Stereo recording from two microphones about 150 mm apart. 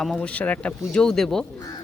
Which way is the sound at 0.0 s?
5° left (ahead or behind).